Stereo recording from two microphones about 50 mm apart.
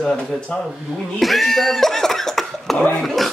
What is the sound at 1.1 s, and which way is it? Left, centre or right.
Speech, centre.